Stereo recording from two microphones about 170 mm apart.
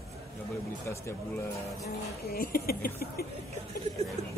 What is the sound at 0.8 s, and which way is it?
Speech, 15° left (ahead or behind).